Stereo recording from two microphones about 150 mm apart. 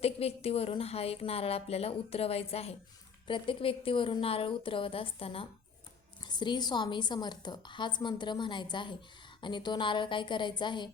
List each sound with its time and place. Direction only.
0.0 s a woman's voice: 40° left (ahead or behind)